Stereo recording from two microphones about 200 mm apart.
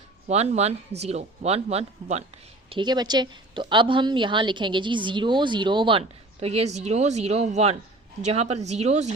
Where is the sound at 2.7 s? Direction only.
20° right (ahead or behind).